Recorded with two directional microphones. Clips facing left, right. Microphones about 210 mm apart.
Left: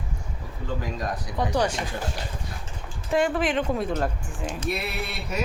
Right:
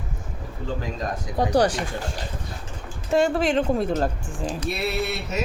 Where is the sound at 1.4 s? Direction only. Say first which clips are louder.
Right 5 dB; 35° right (ahead or behind).